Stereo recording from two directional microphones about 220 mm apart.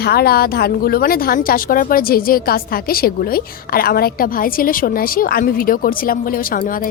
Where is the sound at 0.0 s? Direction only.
45° left (ahead or behind).